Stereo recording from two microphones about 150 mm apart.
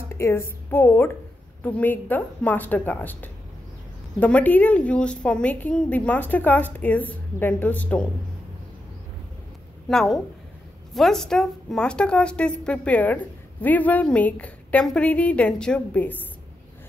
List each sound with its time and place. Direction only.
0.1 s a woman's voice: 20° left (ahead or behind)
9.8 s a woman's voice: centre (ahead or behind)